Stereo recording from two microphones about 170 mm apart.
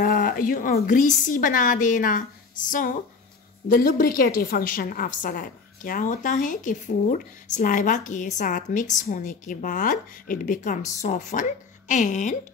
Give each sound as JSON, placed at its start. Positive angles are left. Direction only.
{"t": 0.0, "sound": "a woman's voice", "side_deg": 55}
{"t": 3.6, "sound": "a woman's voice", "side_deg": 55}